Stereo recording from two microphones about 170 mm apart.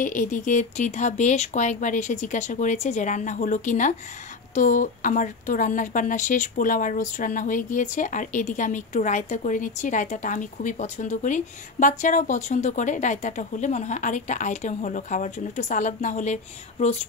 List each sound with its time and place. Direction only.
0.0 s a woman's voice: 50° left (ahead or behind)